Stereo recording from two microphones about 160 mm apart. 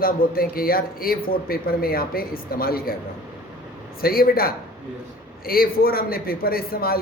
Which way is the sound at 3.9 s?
70° left (ahead or behind).